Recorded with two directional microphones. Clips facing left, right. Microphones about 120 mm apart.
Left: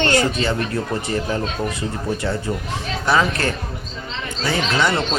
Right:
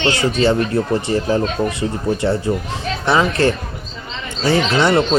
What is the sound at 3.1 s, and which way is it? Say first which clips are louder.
Speech: right 4 dB; 25° right (ahead or behind).